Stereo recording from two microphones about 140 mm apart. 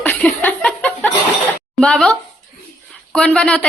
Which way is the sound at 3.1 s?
5° left (ahead or behind).